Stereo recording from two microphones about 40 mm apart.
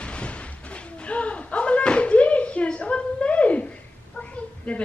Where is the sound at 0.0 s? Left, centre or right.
Left.